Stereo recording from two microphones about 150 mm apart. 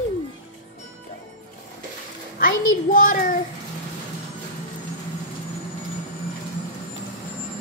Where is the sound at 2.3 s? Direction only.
70° left (ahead or behind).